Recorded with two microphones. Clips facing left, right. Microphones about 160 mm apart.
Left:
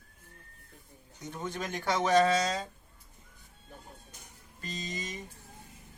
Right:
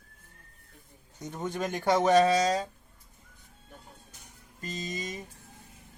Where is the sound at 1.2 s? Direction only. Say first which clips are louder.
Right 4 dB; 45° right (ahead or behind).